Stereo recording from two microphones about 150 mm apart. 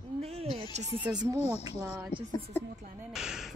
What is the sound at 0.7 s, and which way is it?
Speech, 50° right (ahead or behind).